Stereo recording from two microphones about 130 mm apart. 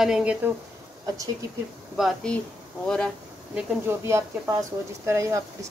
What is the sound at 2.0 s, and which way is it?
Speech, 5° left (ahead or behind).